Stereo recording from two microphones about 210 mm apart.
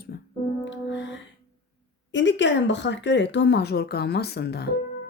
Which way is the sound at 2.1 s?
60° left (ahead or behind).